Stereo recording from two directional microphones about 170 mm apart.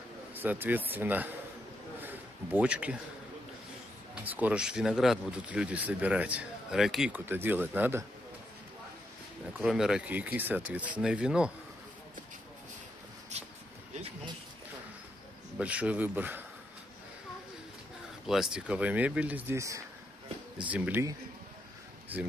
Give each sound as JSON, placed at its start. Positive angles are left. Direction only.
{"t": 0.3, "sound": "speech", "side_deg": -10}
{"t": 2.0, "sound": "a sound", "side_deg": -10}
{"t": 4.1, "sound": "speech", "side_deg": -10}
{"t": 7.2, "sound": "speech", "side_deg": -10}
{"t": 9.5, "sound": "speech", "side_deg": -5}
{"t": 13.3, "sound": "a sound", "side_deg": -40}
{"t": 15.5, "sound": "speech", "side_deg": -10}
{"t": 18.2, "sound": "speech", "side_deg": 0}